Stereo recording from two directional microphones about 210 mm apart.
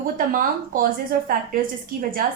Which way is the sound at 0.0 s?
40° right (ahead or behind).